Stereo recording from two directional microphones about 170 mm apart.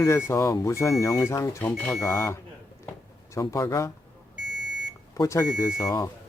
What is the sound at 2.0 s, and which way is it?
Speech, 15° left (ahead or behind).